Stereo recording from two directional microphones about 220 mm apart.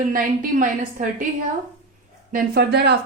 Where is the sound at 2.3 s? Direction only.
45° right (ahead or behind).